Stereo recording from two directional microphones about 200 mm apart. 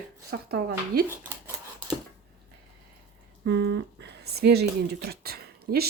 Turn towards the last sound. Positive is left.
turn(degrees=-50)  # may be behind; listen again after turning